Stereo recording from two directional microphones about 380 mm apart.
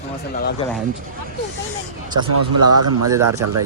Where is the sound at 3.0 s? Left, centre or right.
Centre.